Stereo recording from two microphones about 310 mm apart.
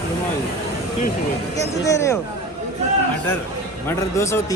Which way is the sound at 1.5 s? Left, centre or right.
Centre.